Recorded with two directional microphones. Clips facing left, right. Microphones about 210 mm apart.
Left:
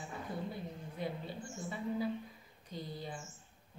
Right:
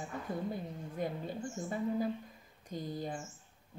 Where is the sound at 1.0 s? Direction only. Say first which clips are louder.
Right 4 dB; 45° right (ahead or behind).